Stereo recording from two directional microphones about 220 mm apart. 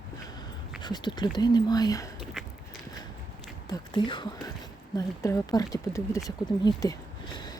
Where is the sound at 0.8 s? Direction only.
20° left (ahead or behind).